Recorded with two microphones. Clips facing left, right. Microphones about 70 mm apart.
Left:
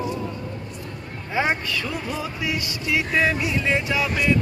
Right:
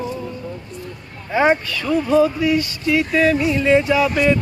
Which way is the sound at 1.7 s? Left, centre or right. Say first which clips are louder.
Right 10 dB; centre.